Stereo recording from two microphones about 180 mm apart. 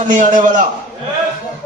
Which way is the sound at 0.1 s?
45° right (ahead or behind).